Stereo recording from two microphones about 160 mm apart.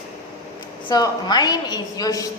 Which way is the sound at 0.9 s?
25° left (ahead or behind).